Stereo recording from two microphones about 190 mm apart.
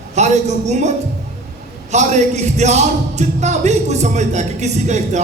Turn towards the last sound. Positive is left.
turn(degrees=-35)  # may be behind; listen again after turning